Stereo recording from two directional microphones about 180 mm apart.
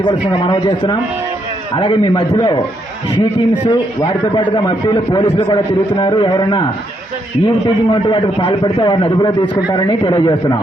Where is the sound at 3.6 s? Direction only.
25° left (ahead or behind).